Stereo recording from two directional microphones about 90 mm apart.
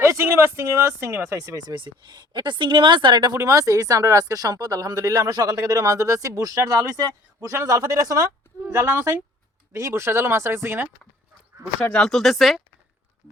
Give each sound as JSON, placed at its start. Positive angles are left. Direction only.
{"t": 0.0, "sound": "speech", "side_deg": -30}
{"t": 1.7, "sound": "speech", "side_deg": -60}
{"t": 3.3, "sound": "speech", "side_deg": -35}
{"t": 6.6, "sound": "speech", "side_deg": -25}
{"t": 6.9, "sound": "speech", "side_deg": -40}
{"t": 11.8, "sound": "speech", "side_deg": 10}